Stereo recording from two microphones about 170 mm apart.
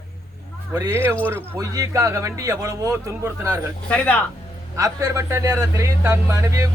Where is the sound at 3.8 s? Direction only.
10° left (ahead or behind).